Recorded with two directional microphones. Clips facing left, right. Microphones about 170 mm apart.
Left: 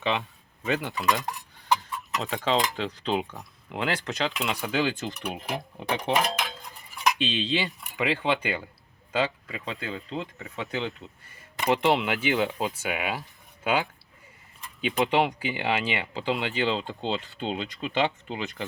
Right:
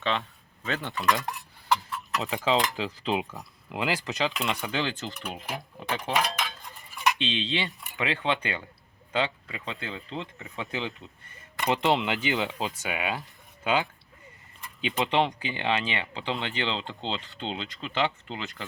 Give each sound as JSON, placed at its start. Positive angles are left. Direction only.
{"t": 0.6, "sound": "speech", "side_deg": 5}
{"t": 1.9, "sound": "chicken", "side_deg": 15}
{"t": 2.2, "sound": "speech", "side_deg": 0}
{"t": 5.0, "sound": "speech", "side_deg": 20}
{"t": 7.1, "sound": "speech", "side_deg": 5}
{"t": 14.8, "sound": "speech", "side_deg": 0}